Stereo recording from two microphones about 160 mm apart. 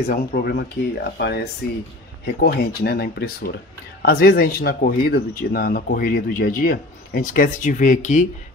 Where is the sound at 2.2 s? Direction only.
75° left (ahead or behind).